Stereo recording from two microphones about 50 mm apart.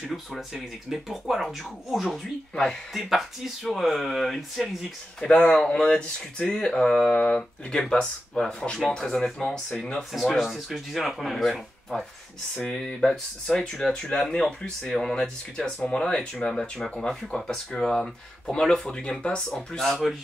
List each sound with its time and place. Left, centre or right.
0.1 s speech: centre
2.5 s speech: centre
2.9 s speech: centre
5.2 s speech: centre
10.1 s speech: centre
12.5 s speech: centre